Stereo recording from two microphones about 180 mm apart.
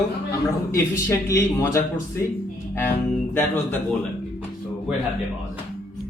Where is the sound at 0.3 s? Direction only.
15° left (ahead or behind).